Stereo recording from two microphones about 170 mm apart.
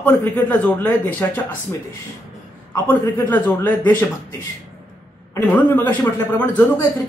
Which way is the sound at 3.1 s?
10° left (ahead or behind).